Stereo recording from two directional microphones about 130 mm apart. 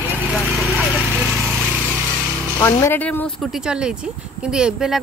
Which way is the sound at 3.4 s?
5° right (ahead or behind).